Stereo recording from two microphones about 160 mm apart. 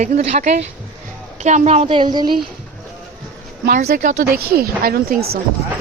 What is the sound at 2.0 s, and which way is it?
Speech, 25° right (ahead or behind).